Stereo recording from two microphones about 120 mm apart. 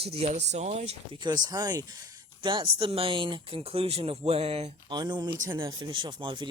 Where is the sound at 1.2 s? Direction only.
35° right (ahead or behind); by 4.7 s 60° right (ahead or behind).